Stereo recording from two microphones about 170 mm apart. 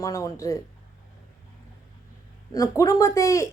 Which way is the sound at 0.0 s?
20° left (ahead or behind).